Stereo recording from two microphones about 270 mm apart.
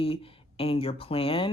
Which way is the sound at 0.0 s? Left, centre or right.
Left.